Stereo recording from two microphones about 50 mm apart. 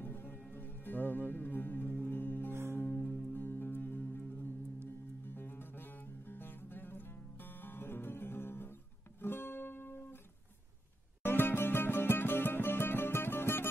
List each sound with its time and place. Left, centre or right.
0.0 s music: left
2.5 s music: right
2.9 s music: left
3.3 s music: left
11.2 s music: left